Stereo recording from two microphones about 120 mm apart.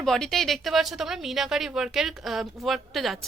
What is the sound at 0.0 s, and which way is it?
Speech, 5° left (ahead or behind).